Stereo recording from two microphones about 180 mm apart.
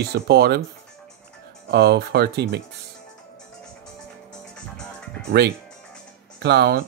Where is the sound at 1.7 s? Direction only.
65° right (ahead or behind).